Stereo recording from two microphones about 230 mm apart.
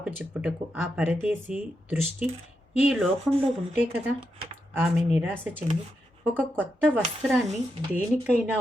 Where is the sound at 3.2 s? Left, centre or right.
Right.